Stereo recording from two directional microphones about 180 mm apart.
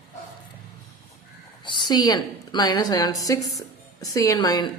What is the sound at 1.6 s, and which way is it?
A woman's voice, 25° left (ahead or behind).